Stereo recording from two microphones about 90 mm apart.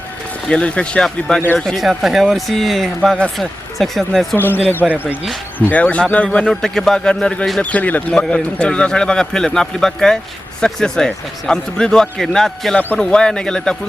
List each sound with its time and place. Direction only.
0.4 s speech: 10° left (ahead or behind)
4.8 s speech: 15° right (ahead or behind)
5.5 s speech: 20° left (ahead or behind)
7.6 s speech: 15° left (ahead or behind)